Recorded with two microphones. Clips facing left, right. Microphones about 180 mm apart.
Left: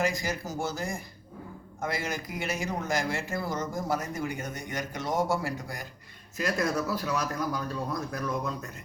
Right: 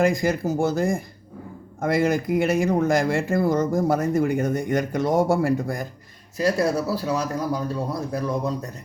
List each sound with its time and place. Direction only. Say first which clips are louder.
0.0 s speech: right 9 dB; 55° right (ahead or behind)
6.3 s speech: right 7 dB; 35° right (ahead or behind)